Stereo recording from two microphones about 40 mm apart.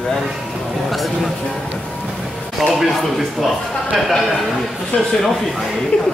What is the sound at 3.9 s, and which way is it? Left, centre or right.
Speech, centre.